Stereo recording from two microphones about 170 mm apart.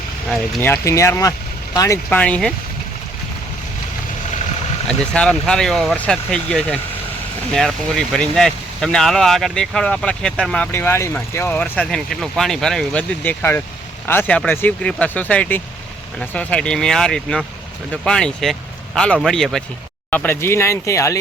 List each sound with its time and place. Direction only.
0.6 s speech: 15° left (ahead or behind)
2.0 s speech: 10° left (ahead or behind)
4.9 s speech: 5° left (ahead or behind)